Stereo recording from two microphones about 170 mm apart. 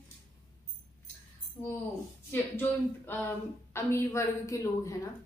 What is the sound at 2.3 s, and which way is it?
A woman's voice, 10° left (ahead or behind).